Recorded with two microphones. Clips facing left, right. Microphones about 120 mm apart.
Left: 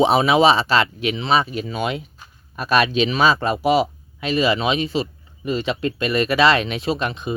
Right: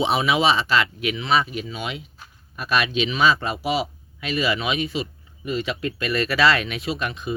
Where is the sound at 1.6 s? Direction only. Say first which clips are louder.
Left 7 dB; 45° left (ahead or behind).